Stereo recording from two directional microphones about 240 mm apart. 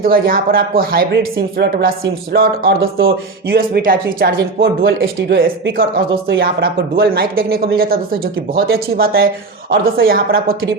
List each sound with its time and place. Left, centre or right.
0.0 s speech: right